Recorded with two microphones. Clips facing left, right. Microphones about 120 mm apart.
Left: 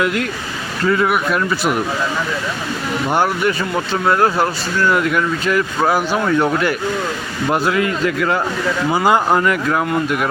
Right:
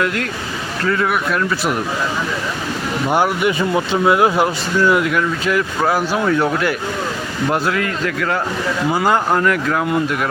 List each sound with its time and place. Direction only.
0.0 s speech: 5° left (ahead or behind)
3.1 s speech: 5° right (ahead or behind)